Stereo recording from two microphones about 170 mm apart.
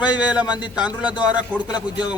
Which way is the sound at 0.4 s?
25° left (ahead or behind).